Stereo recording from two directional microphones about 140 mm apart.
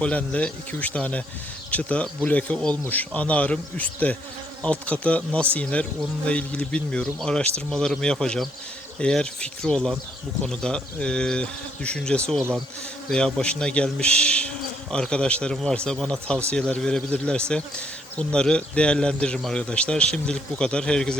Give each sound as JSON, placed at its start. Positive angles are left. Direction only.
{"t": 0.0, "sound": "speech", "side_deg": 10}